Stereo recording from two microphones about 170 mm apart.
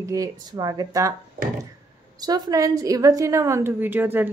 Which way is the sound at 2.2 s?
25° right (ahead or behind).